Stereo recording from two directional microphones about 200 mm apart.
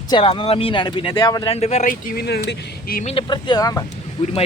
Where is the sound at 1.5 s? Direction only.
35° left (ahead or behind).